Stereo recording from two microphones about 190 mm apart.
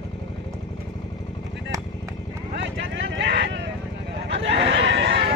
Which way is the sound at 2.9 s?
70° right (ahead or behind).